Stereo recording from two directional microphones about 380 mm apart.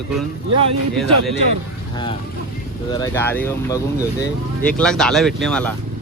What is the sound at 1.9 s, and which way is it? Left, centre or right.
Boat, centre.